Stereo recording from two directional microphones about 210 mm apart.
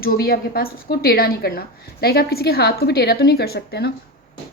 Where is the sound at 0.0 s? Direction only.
45° left (ahead or behind).